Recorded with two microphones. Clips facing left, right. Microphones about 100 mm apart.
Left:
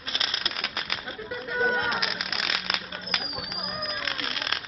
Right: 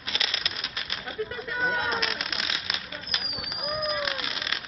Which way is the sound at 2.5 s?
60° left (ahead or behind).